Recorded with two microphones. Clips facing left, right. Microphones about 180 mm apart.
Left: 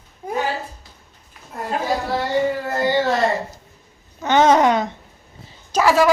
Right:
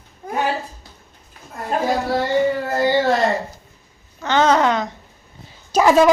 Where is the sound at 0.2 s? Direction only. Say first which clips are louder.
Left 1 dB; 15° left (ahead or behind).